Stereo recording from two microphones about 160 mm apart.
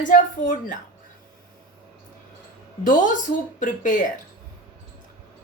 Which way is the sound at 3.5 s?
55° left (ahead or behind).